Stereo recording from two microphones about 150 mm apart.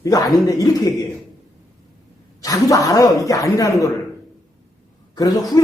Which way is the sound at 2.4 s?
25° left (ahead or behind).